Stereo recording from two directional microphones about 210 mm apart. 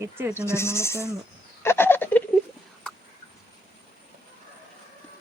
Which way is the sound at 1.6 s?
10° left (ahead or behind).